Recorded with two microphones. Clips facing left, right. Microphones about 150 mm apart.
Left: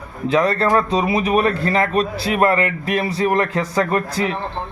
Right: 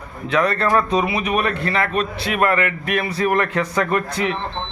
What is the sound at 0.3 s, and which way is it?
A man's voice, 30° left (ahead or behind).